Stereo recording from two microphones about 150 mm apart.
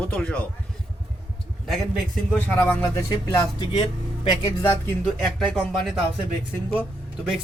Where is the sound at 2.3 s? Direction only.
10° left (ahead or behind).